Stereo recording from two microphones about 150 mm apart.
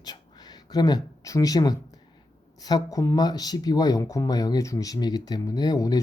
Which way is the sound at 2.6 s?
25° left (ahead or behind).